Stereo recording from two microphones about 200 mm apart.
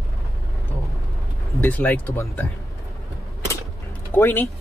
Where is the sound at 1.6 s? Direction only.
10° left (ahead or behind).